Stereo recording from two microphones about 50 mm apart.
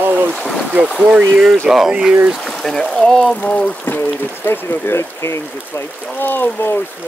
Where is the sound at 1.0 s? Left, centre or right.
Right.